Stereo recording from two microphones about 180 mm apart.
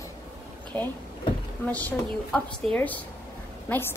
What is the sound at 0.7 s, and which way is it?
A woman's voice, 5° left (ahead or behind).